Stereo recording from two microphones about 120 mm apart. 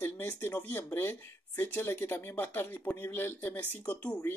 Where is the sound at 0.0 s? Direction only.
15° left (ahead or behind).